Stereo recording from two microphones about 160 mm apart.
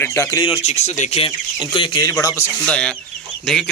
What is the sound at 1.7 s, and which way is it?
Speech, 30° left (ahead or behind).